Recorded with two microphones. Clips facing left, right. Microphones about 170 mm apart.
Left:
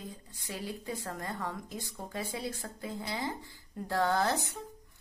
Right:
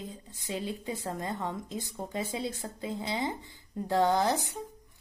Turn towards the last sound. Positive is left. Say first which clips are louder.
# right 3 dB
turn(degrees=-15)  # may be behind; listen again after turning